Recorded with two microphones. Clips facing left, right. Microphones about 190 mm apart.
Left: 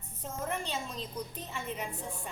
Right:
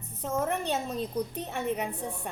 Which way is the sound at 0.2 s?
70° right (ahead or behind).